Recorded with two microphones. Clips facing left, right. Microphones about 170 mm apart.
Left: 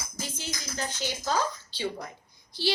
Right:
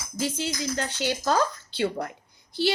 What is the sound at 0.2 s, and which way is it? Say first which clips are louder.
Speech: right 10 dB; 75° right (ahead or behind).